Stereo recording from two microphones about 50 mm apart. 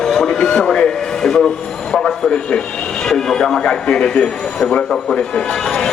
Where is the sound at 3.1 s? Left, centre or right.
Centre.